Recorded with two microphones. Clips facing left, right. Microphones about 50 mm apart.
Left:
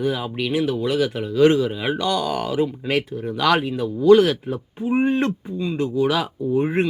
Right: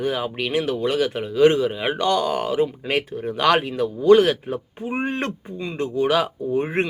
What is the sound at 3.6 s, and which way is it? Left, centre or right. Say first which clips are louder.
Speech: even; right.